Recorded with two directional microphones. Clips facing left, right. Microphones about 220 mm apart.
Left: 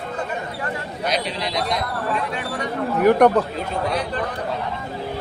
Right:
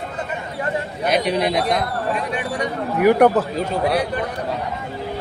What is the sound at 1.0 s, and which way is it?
Speech, 55° right (ahead or behind).